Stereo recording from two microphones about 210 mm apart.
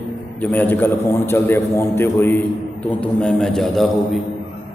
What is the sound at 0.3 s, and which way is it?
A man's voice, 10° left (ahead or behind).